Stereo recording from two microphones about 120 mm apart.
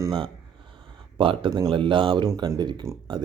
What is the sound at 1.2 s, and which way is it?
Speech, 45° right (ahead or behind).